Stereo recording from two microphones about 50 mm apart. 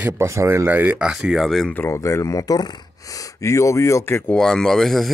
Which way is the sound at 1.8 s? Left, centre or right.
Left.